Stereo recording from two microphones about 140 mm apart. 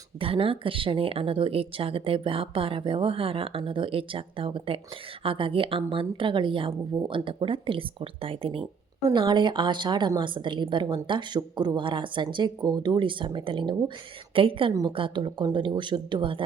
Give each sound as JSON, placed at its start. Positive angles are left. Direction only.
{"t": 0.2, "sound": "a woman's voice", "side_deg": -40}